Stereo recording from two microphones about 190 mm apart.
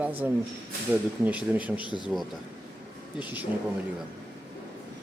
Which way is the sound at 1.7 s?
25° left (ahead or behind).